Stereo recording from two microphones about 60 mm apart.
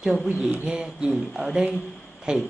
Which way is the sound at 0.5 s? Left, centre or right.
Right.